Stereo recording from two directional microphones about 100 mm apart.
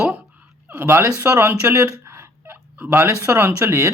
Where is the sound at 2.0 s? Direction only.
25° right (ahead or behind).